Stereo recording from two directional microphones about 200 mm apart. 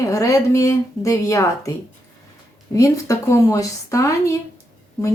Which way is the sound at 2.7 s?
15° left (ahead or behind).